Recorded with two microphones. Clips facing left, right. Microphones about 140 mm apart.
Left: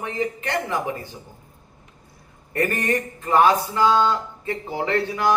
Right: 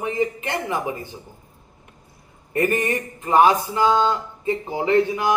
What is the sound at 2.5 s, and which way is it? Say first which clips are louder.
Speech: right 2 dB; 15° right (ahead or behind).